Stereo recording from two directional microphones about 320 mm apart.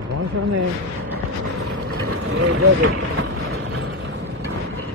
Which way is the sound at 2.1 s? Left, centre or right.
Right.